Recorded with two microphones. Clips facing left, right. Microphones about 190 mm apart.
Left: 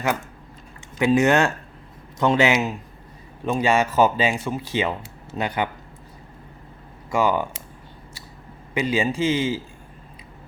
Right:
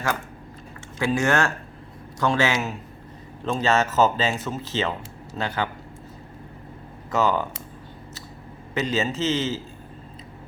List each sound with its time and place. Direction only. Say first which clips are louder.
0.9 s speech: left 4 dB; 20° left (ahead or behind)
7.1 s speech: left 1 dB; 10° left (ahead or behind)
8.7 s speech: left 2 dB; 10° left (ahead or behind)